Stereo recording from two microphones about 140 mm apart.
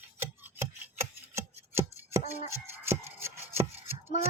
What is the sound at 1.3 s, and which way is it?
Chopping, 20° right (ahead or behind).